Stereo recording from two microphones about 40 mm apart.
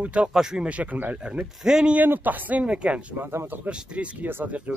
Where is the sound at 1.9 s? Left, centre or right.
Right.